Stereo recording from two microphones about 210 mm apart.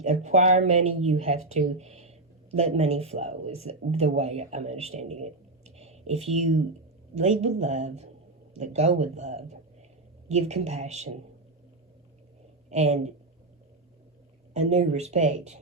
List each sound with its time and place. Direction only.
0.0 s speech: 35° right (ahead or behind)
12.7 s speech: 35° right (ahead or behind)
14.5 s speech: 35° right (ahead or behind)